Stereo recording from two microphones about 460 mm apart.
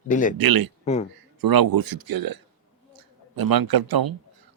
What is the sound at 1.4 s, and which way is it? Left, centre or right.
A man's voice, right.